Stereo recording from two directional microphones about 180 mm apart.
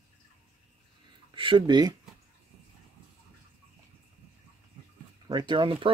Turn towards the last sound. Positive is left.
turn(degrees=-30)  # may be behind; listen again after turning